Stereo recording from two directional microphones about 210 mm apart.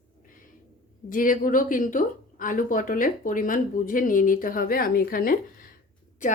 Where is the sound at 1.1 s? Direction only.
40° left (ahead or behind).